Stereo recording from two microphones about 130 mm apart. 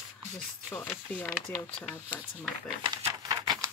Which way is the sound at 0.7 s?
15° left (ahead or behind).